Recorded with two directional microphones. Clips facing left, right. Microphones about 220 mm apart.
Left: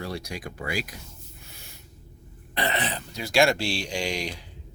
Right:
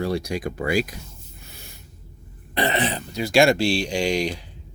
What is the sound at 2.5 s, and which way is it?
Speech, 25° right (ahead or behind).